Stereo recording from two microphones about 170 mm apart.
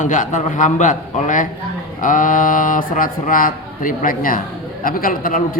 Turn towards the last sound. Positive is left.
turn(degrees=55)  # may be behind; listen again after turning